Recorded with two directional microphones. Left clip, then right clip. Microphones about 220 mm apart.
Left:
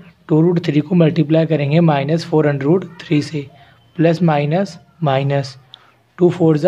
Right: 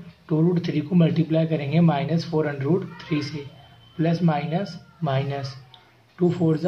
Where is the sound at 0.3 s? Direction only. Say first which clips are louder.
Left 9 dB; 50° left (ahead or behind).